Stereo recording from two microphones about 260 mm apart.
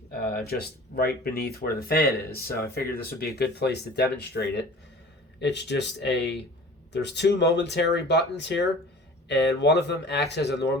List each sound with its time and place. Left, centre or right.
0.1 s speech: left